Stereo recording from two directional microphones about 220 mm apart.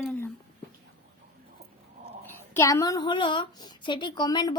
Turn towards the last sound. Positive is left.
turn(degrees=20)  # may be behind; listen again after turning